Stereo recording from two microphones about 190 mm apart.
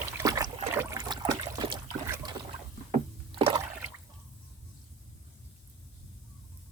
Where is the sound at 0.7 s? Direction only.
10° right (ahead or behind).